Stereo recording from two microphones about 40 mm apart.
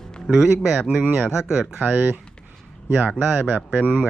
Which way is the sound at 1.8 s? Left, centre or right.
Right.